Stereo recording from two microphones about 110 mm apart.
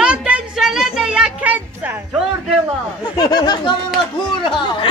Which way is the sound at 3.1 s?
40° left (ahead or behind).